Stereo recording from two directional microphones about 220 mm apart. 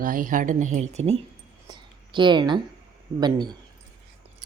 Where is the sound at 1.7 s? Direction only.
20° right (ahead or behind).